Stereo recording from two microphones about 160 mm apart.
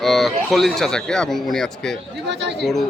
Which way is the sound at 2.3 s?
90° right.